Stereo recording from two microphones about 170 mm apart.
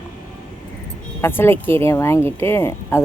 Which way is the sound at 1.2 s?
15° left (ahead or behind).